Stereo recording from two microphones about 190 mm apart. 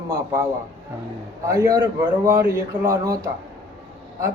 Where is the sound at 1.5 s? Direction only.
15° right (ahead or behind).